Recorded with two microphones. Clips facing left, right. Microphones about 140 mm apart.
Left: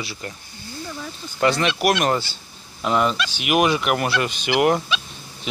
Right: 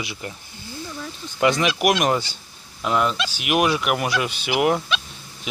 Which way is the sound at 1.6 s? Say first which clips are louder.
Even; 10° right (ahead or behind).